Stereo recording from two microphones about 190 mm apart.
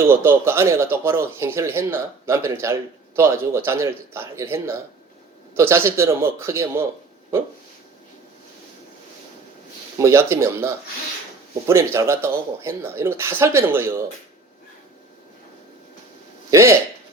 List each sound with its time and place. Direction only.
0.0 s speech: 10° right (ahead or behind)
10.0 s speech: 15° right (ahead or behind)
11.7 s speech: 15° right (ahead or behind)
16.5 s speech: 15° right (ahead or behind)